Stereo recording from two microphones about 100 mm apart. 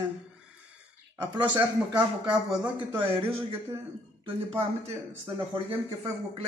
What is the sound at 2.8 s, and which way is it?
Speech, 70° right (ahead or behind).